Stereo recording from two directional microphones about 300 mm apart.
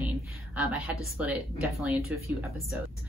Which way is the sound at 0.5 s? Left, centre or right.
Centre.